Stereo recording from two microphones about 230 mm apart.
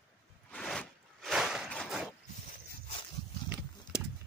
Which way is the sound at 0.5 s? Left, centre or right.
Centre.